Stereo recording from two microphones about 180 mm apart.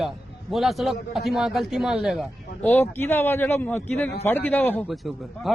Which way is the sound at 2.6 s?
10° left (ahead or behind).